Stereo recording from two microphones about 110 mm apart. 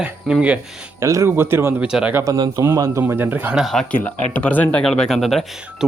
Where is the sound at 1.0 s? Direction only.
25° right (ahead or behind).